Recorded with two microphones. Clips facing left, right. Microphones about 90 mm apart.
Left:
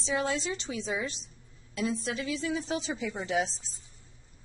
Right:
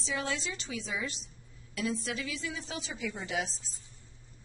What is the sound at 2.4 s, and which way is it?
Speech, 35° left (ahead or behind).